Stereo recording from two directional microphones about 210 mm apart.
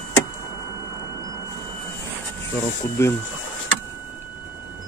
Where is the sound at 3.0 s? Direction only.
10° left (ahead or behind).